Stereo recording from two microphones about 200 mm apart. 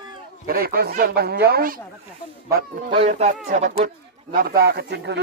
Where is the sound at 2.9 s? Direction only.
30° right (ahead or behind).